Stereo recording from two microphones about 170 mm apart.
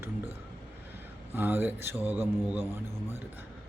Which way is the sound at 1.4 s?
10° right (ahead or behind).